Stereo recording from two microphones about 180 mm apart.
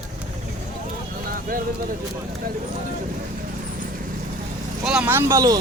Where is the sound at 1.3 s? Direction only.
50° right (ahead or behind).